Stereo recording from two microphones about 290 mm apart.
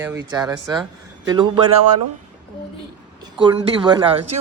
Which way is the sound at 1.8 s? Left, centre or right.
Right.